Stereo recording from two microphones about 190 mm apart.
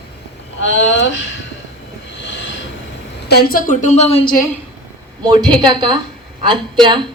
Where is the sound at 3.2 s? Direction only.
55° left (ahead or behind); by 4.3 s 35° left (ahead or behind).